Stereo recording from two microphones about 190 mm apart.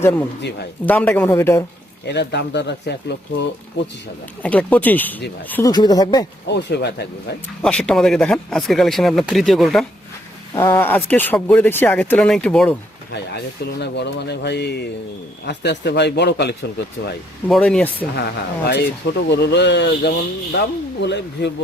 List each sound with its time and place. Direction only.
0.0 s speech: 10° left (ahead or behind)
2.0 s speech: 65° left (ahead or behind)
4.4 s speech: 10° left (ahead or behind)
5.7 s speech: 20° left (ahead or behind)
6.5 s speech: 60° left (ahead or behind)
7.6 s speech: 5° left (ahead or behind)
10.6 s speech: 10° left (ahead or behind)
13.3 s speech: 60° left (ahead or behind)
17.5 s speech: 5° left (ahead or behind)
18.1 s speech: 60° left (ahead or behind)